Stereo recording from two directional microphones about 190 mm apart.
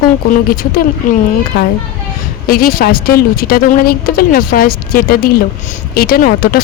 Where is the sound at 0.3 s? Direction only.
50° left (ahead or behind).